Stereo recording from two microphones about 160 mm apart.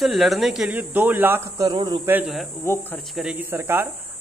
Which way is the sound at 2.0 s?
10° right (ahead or behind).